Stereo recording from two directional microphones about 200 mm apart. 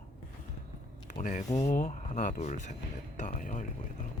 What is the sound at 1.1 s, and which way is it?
Speech, 40° left (ahead or behind).